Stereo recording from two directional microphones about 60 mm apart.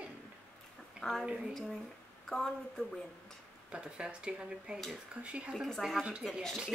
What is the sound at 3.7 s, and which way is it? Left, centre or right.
Speech, centre.